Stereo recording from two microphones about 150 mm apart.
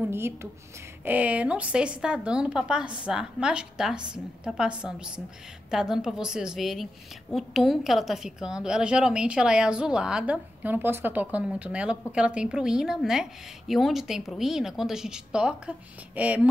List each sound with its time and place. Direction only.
0.0 s a woman's voice: 15° right (ahead or behind)